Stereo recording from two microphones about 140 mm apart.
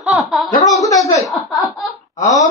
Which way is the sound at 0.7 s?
25° left (ahead or behind).